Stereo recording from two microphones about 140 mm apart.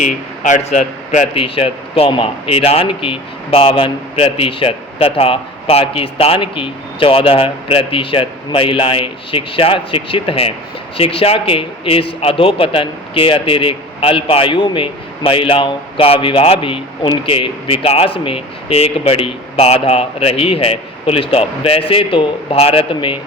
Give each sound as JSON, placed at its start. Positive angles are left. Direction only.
{"t": 0.0, "sound": "a man's voice", "side_deg": 60}
{"t": 1.4, "sound": "speech", "side_deg": 40}